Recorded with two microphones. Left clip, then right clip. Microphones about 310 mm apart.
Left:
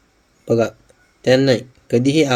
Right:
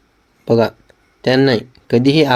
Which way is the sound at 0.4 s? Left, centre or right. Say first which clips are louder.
Right 3 dB; centre.